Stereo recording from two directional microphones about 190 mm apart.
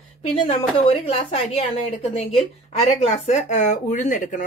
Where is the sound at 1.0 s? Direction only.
30° left (ahead or behind).